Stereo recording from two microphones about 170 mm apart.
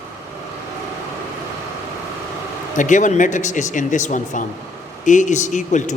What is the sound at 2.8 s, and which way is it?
A man's voice, 50° left (ahead or behind).